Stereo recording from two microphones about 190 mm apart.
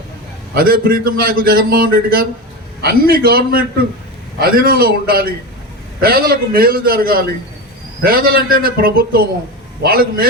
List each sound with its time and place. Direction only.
0.5 s a man's voice: 50° right (ahead or behind)